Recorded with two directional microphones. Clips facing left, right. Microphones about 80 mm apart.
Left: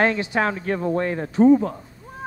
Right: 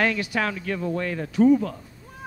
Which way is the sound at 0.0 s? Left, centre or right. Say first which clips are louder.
Left 4 dB; left.